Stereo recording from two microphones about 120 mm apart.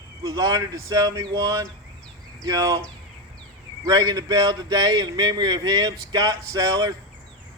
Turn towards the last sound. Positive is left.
turn(degrees=-30)  # may be behind; listen again after turning